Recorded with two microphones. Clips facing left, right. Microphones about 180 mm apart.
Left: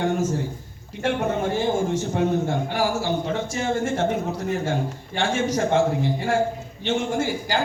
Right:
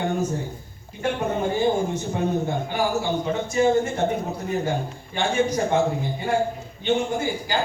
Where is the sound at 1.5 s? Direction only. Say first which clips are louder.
Even; 90° left.